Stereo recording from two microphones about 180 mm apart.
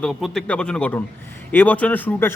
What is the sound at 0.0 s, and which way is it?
A man's voice, centre (ahead or behind).